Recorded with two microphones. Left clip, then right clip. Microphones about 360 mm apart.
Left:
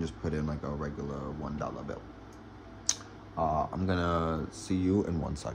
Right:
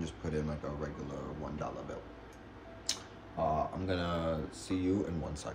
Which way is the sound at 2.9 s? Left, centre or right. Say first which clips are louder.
Left 5 dB; centre.